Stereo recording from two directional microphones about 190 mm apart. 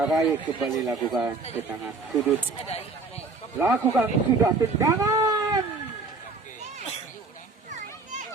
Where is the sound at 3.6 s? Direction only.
10° right (ahead or behind).